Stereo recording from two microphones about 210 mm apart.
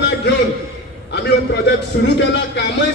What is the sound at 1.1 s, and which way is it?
Speech, 55° left (ahead or behind).